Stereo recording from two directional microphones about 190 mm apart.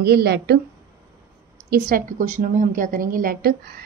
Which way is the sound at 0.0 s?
60° right (ahead or behind).